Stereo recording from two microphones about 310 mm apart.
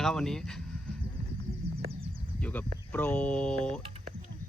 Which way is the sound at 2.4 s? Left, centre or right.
Centre.